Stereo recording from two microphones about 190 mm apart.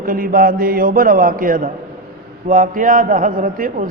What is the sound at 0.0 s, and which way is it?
A man's voice, 50° right (ahead or behind).